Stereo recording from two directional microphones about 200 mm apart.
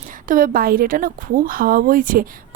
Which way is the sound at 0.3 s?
45° right (ahead or behind).